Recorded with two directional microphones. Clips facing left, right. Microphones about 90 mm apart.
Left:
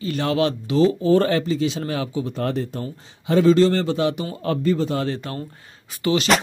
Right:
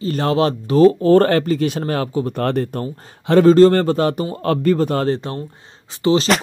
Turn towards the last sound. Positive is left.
turn(degrees=-30)  # may be behind; listen again after turning